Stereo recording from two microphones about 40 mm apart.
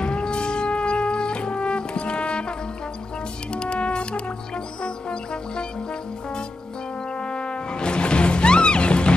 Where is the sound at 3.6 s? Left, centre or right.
Left.